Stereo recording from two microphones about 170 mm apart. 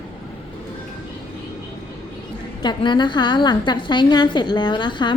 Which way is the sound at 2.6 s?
25° left (ahead or behind).